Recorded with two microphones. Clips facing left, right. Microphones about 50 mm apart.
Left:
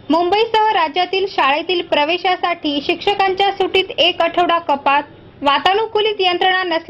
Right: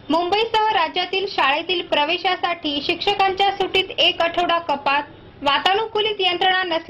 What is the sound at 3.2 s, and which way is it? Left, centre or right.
Speech, left.